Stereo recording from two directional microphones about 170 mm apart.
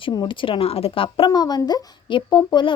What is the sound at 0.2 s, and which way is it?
Speech, 30° left (ahead or behind).